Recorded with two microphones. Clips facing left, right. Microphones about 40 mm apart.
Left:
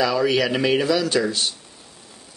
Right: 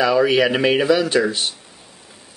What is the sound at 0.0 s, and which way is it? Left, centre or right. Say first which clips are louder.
Speech: right 4 dB; centre.